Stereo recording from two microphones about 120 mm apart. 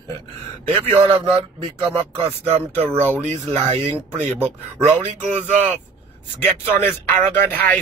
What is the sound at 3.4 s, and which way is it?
Speech, 35° right (ahead or behind).